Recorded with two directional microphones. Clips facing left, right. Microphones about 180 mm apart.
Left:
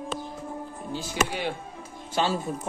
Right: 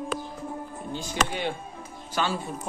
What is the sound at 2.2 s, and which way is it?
Speech, 40° left (ahead or behind).